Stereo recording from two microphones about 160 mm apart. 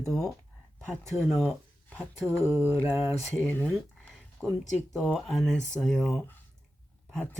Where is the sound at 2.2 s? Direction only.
20° right (ahead or behind).